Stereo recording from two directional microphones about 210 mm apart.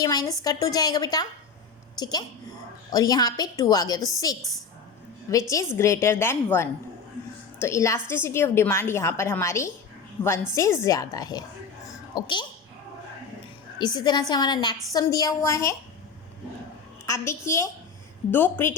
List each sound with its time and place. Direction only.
0.0 s a woman's voice: 15° left (ahead or behind)
13.7 s a woman's voice: 20° left (ahead or behind)
17.1 s a woman's voice: 15° left (ahead or behind)